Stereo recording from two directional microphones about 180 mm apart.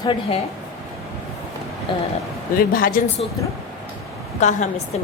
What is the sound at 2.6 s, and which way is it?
Speech, 55° left (ahead or behind).